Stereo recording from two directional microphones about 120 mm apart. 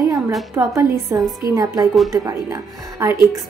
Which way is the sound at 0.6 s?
25° right (ahead or behind).